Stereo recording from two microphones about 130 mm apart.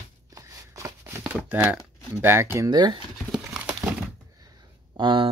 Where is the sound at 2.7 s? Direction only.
30° right (ahead or behind).